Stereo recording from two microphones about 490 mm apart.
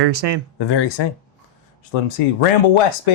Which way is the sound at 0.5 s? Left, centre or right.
Left.